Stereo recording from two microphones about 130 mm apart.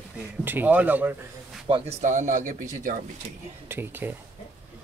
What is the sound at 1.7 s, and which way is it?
Speech, 55° right (ahead or behind).